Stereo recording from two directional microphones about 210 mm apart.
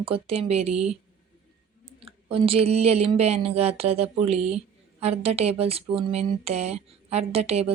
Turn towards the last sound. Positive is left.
turn(degrees=-30)  # may be behind; listen again after turning